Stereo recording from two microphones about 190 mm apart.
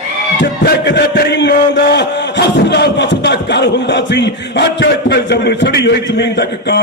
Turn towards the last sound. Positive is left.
turn(degrees=65)  # may be behind; listen again after turning